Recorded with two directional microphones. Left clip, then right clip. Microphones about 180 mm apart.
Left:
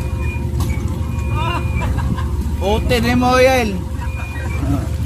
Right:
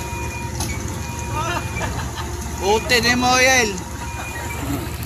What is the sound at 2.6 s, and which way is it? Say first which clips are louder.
Speech: right 1 dB; 55° left (ahead or behind).